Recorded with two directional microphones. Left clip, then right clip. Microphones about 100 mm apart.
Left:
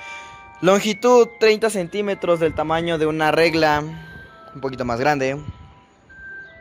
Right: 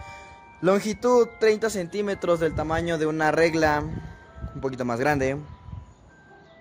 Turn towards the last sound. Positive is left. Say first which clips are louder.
# left 4 dB
turn(degrees=-5)  # may be behind; listen again after turning